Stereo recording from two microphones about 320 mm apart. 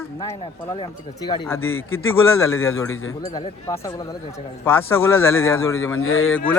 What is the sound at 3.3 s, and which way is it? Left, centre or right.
Speech, centre.